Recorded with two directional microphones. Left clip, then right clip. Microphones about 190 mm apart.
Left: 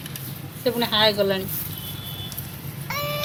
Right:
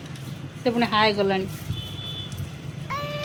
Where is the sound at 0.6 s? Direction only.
40° right (ahead or behind).